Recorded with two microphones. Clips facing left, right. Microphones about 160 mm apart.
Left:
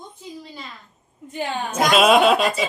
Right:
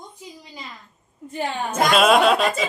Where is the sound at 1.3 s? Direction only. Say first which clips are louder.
Even; centre (ahead or behind).